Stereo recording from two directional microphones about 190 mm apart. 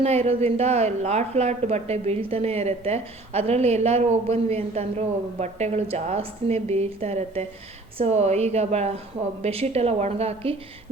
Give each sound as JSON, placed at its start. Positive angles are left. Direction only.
{"t": 0.0, "sound": "a woman's voice", "side_deg": -35}